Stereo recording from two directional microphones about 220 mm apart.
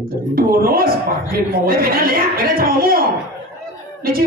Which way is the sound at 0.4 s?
40° right (ahead or behind).